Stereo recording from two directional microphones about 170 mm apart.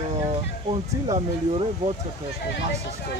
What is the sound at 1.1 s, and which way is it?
Speech, 35° right (ahead or behind).